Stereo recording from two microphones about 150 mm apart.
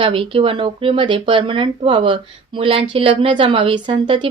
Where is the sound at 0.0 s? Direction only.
35° right (ahead or behind).